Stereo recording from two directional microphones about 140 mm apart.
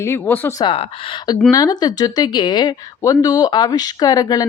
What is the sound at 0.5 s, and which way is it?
Speech, 35° left (ahead or behind).